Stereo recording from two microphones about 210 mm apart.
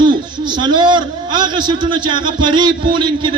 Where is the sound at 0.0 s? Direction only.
20° right (ahead or behind).